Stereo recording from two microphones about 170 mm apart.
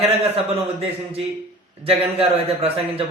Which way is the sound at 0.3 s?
35° right (ahead or behind).